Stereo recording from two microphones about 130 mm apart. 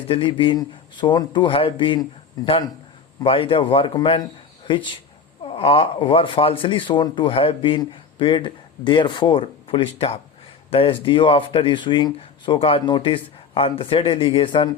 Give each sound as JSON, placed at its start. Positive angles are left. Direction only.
{"t": 0.1, "sound": "speech", "side_deg": 40}